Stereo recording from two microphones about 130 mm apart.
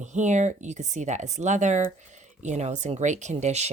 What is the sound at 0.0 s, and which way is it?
Speech, 65° right (ahead or behind).